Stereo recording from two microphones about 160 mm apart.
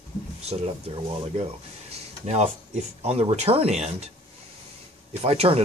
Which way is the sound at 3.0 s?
40° right (ahead or behind).